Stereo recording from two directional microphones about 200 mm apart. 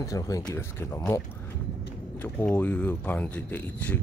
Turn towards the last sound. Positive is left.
turn(degrees=10)  # may be behind; listen again after turning